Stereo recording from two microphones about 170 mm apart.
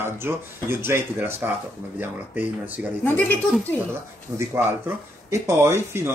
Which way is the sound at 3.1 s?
10° left (ahead or behind).